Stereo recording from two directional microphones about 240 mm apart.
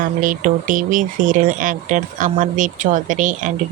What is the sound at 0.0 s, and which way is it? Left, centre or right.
Speech, right.